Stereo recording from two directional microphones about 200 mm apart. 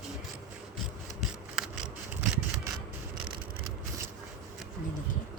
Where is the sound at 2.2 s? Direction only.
5° right (ahead or behind).